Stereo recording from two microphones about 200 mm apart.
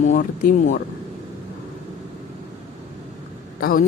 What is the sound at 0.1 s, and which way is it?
Speech, 40° left (ahead or behind).